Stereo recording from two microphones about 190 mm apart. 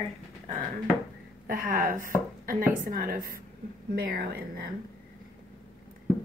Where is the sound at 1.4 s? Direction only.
50° right (ahead or behind).